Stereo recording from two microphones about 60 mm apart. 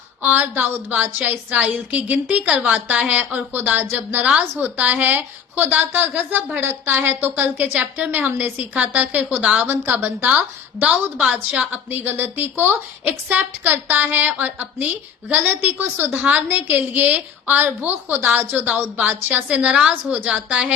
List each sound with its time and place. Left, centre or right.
0.2 s a woman's voice: right
16.1 s a woman's voice: right